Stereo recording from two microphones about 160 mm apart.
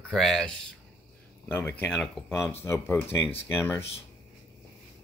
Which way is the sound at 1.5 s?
15° left (ahead or behind).